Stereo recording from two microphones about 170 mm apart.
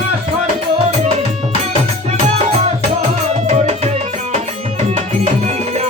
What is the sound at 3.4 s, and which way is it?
Music, 40° right (ahead or behind).